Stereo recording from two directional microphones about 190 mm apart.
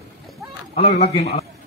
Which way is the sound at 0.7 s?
35° left (ahead or behind).